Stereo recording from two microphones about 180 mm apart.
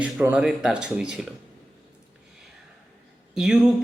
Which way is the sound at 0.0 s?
10° right (ahead or behind).